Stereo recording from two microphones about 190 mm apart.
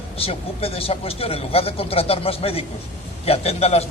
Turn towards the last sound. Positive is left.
turn(degrees=35)  # may be behind; listen again after turning